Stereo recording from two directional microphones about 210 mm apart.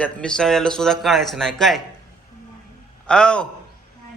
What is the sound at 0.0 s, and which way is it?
Speech, 5° left (ahead or behind).